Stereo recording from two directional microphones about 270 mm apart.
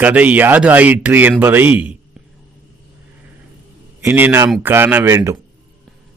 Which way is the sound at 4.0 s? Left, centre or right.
Centre.